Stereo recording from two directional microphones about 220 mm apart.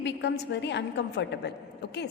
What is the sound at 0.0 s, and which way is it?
A woman's voice, 50° left (ahead or behind).